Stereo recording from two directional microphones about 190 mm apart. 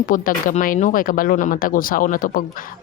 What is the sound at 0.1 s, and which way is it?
Speech, 45° left (ahead or behind).